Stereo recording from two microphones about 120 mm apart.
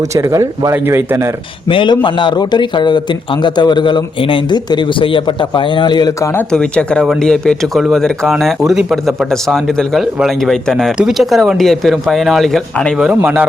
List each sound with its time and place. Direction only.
0.1 s speech: 25° right (ahead or behind)
1.7 s a man's voice: 45° left (ahead or behind)
6.5 s speech: 10° left (ahead or behind); by 13.5 s 10° right (ahead or behind)